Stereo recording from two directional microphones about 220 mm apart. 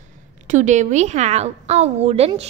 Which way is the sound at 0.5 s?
35° right (ahead or behind).